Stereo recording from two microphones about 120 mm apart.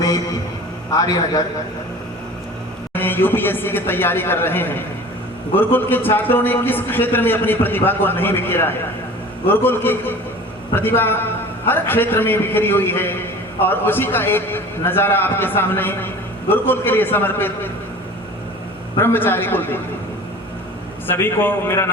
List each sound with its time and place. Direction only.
0.9 s a man's voice: 30° left (ahead or behind)
2.9 s a man's voice: 15° left (ahead or behind)
18.9 s a man's voice: 20° left (ahead or behind)
21.1 s a man's voice: 20° left (ahead or behind)